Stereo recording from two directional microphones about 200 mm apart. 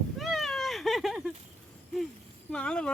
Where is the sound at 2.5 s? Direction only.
5° left (ahead or behind).